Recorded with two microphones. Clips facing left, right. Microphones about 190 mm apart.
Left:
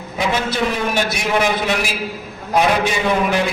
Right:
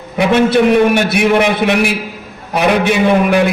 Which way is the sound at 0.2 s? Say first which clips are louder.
Right 9 dB; 60° right (ahead or behind).